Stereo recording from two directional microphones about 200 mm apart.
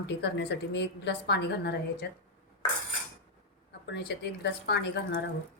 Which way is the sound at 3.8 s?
55° left (ahead or behind).